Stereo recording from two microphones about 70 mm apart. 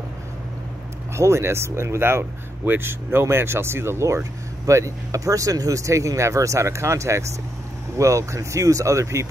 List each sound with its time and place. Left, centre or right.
1.1 s speech: right